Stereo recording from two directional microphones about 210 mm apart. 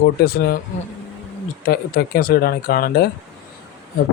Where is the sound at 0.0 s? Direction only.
50° left (ahead or behind).